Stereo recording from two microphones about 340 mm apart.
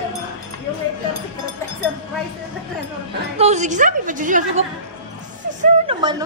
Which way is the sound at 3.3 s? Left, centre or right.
Centre.